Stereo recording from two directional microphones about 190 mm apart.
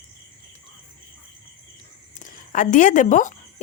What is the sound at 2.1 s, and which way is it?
Speech, 45° left (ahead or behind).